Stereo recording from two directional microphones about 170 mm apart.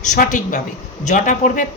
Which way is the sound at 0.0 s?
50° left (ahead or behind).